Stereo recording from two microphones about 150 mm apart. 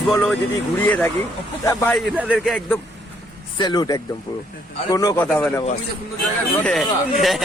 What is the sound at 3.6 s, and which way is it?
Speech, 30° left (ahead or behind).